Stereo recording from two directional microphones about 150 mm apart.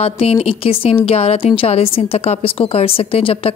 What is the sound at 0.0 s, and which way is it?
Speech, 40° left (ahead or behind).